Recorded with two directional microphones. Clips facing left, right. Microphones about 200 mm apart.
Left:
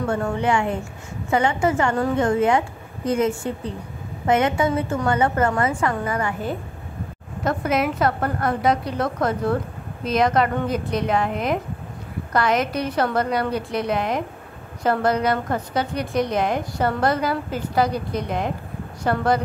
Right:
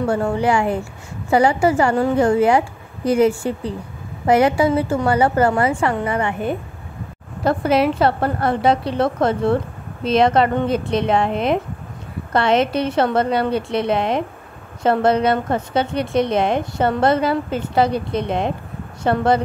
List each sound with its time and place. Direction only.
0.0 s a woman's voice: 30° right (ahead or behind)